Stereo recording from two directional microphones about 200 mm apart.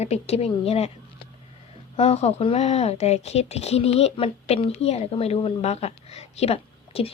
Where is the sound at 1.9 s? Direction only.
30° left (ahead or behind).